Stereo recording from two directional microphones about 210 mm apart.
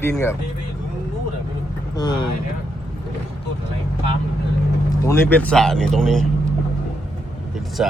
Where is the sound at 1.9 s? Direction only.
20° left (ahead or behind).